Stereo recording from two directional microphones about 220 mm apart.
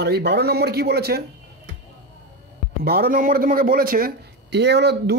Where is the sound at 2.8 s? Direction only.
45° right (ahead or behind).